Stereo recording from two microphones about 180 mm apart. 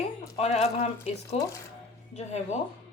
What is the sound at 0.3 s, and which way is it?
Speech, 35° left (ahead or behind).